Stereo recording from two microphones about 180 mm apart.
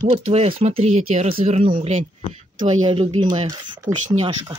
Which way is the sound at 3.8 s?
40° right (ahead or behind).